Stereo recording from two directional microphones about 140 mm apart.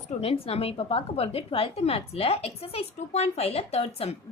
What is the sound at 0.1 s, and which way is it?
A woman's voice, 50° left (ahead or behind).